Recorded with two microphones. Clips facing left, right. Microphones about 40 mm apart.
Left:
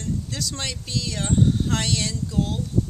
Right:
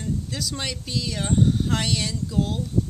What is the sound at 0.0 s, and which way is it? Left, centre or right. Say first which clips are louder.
Speech: even; centre.